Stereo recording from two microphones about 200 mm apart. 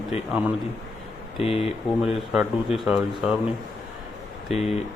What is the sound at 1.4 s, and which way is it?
Speech, 30° left (ahead or behind).